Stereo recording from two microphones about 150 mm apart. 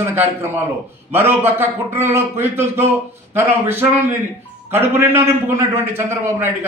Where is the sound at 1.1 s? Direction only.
15° right (ahead or behind).